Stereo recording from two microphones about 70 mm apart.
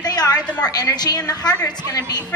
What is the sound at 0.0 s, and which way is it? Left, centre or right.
A woman's voice, left.